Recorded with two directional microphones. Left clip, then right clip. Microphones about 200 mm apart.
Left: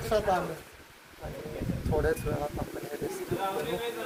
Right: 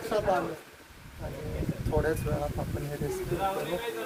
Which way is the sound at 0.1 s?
5° right (ahead or behind).